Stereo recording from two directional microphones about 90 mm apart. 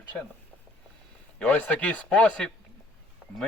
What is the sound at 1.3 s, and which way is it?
Speech, 15° left (ahead or behind).